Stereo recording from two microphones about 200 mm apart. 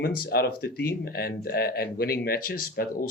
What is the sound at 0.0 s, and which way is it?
Speech, 50° left (ahead or behind).